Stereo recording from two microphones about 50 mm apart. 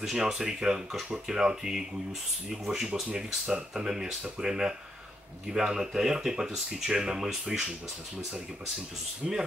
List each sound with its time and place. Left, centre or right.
0.0 s speech: centre
2.9 s speech: right
9.2 s speech: centre